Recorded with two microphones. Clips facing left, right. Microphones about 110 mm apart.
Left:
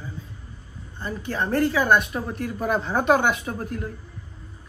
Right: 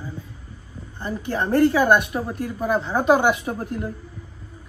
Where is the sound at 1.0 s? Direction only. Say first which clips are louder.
Right 2 dB; 15° right (ahead or behind).